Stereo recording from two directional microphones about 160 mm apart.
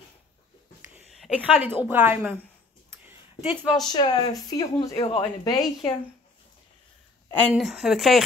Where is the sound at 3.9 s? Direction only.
30° left (ahead or behind).